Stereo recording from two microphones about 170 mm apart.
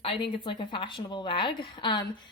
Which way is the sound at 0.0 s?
30° left (ahead or behind).